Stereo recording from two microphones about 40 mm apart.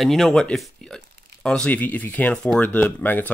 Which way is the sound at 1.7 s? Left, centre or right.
Left.